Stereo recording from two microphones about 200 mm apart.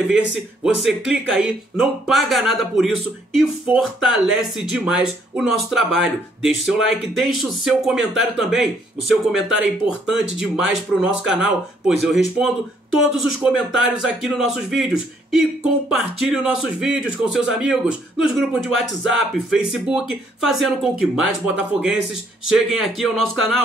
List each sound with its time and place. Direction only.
0.8 s speech: 5° right (ahead or behind)